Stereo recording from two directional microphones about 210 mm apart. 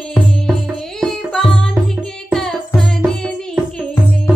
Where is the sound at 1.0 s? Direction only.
Centre (ahead or behind).